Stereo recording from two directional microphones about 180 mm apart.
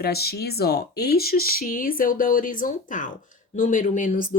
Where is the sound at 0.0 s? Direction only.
60° left (ahead or behind).